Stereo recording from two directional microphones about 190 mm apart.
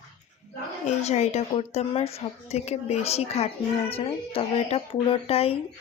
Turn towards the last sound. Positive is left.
turn(degrees=30)  # may be behind; listen again after turning